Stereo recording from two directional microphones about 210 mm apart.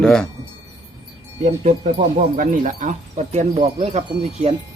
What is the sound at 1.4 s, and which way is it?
Speech, 30° right (ahead or behind).